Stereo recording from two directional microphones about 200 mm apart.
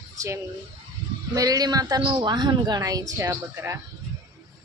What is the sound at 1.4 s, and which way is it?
A woman's voice, 20° right (ahead or behind).